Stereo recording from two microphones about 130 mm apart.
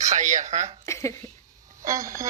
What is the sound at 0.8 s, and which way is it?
Speech, 25° left (ahead or behind).